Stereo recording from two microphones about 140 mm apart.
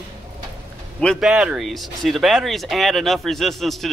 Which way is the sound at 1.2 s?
5° right (ahead or behind).